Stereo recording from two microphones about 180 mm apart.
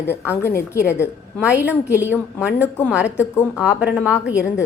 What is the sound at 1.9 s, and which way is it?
Speech, 10° right (ahead or behind).